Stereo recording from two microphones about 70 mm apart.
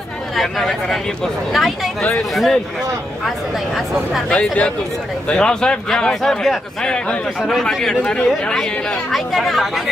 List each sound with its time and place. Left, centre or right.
0.4 s speech: centre
2.3 s speech: centre
4.3 s speech: centre
6.4 s speech: centre
6.9 s speech: centre